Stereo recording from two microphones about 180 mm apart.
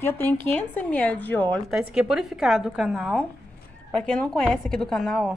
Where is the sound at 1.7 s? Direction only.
5° right (ahead or behind).